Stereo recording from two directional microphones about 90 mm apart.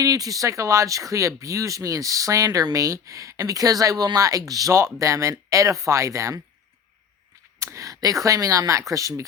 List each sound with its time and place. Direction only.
0.0 s speech: 40° right (ahead or behind)
7.6 s speech: 35° right (ahead or behind)